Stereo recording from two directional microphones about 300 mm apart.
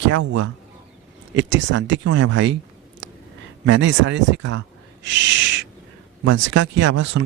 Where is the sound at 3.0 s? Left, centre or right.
Right.